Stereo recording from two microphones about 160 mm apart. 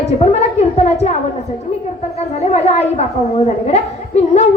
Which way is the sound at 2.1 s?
40° left (ahead or behind).